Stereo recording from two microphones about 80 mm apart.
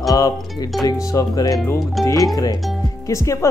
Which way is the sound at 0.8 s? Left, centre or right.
Left.